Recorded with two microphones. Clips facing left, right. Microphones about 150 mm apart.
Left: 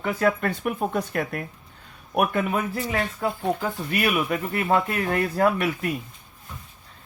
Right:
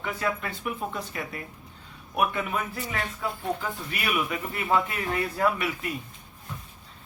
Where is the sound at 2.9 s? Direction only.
35° left (ahead or behind).